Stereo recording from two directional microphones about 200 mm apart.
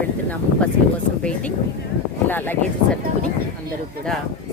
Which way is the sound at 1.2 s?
5° left (ahead or behind).